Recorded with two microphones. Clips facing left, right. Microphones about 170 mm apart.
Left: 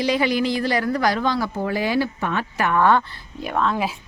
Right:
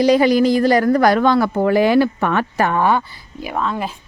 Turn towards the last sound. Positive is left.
turn(degrees=5)  # may be behind; listen again after turning